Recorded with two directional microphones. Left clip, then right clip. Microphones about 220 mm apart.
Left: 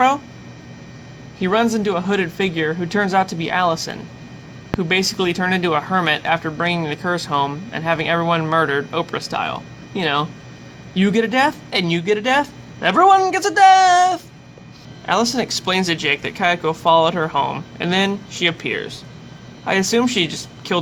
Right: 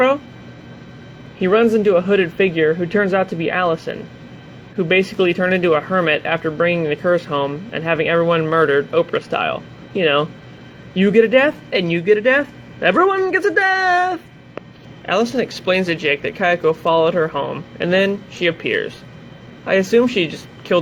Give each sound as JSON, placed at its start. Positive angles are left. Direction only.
{"t": 1.4, "sound": "speech", "side_deg": 15}
{"t": 4.8, "sound": "speech", "side_deg": 15}